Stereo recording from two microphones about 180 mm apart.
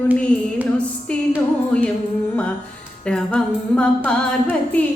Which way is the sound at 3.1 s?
5° left (ahead or behind).